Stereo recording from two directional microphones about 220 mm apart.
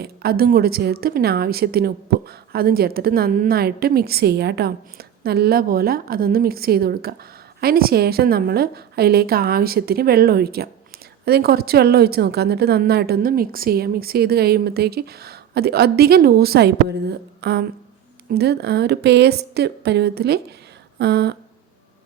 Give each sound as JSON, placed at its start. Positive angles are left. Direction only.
{"t": 0.0, "sound": "a woman's voice", "side_deg": -45}